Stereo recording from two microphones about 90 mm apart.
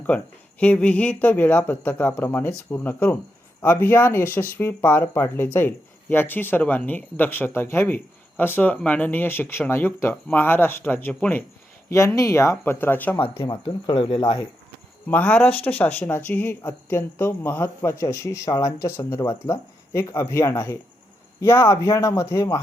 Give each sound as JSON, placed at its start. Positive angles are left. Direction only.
{"t": 0.1, "sound": "speech", "side_deg": 10}
{"t": 11.9, "sound": "a woman's voice", "side_deg": 35}
{"t": 13.4, "sound": "speech", "side_deg": 55}
{"t": 14.2, "sound": "speech", "side_deg": 45}
{"t": 15.0, "sound": "a woman's voice", "side_deg": 20}